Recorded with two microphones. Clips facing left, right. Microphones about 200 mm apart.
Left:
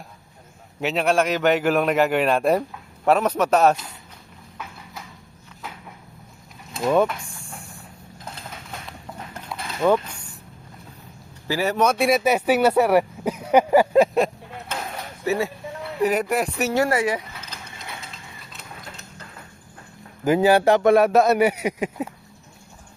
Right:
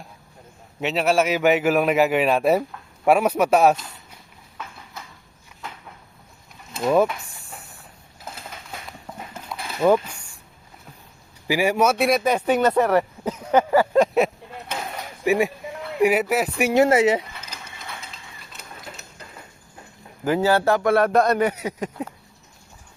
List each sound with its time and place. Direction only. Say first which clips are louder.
0.8 s a man's voice: even; centre (ahead or behind)
6.7 s vehicle: right 1 dB; 5° right (ahead or behind)
8.2 s a sound: even; 5° right (ahead or behind)
8.9 s horse: even; centre (ahead or behind)
11.4 s speech: right 1 dB; 15° right (ahead or behind); by 14.1 s 10° left (ahead or behind)
15.2 s a man's voice: right 3 dB; 15° right (ahead or behind)
18.5 s printer: right 1 dB; 5° right (ahead or behind)
20.2 s speech: left 3 dB; 15° left (ahead or behind)
21.0 s speech: left 2 dB; 5° left (ahead or behind)